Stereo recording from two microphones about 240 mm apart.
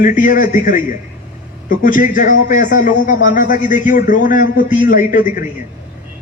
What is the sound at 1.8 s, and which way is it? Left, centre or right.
Speech, left.